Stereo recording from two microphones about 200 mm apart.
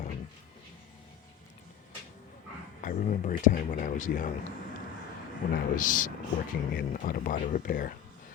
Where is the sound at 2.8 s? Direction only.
40° left (ahead or behind).